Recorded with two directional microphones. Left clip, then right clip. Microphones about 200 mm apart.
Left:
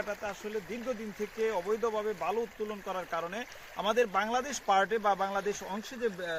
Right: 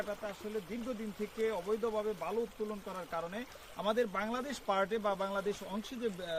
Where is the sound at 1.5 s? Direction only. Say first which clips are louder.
Left 4 dB; 30° left (ahead or behind).